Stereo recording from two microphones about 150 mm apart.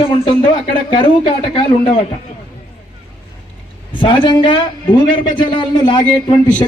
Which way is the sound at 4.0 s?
35° left (ahead or behind).